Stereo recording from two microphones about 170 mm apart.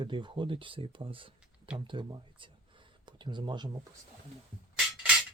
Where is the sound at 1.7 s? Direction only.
30° right (ahead or behind).